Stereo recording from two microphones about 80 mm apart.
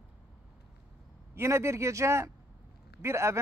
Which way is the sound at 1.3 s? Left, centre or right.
Right.